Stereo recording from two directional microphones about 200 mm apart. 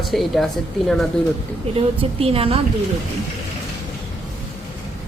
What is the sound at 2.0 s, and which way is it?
Speech, 30° right (ahead or behind).